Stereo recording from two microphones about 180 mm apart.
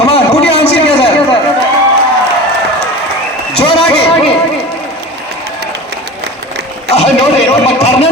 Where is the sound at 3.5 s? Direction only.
35° left (ahead or behind).